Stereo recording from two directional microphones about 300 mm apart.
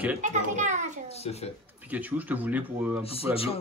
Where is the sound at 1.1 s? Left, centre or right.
Left.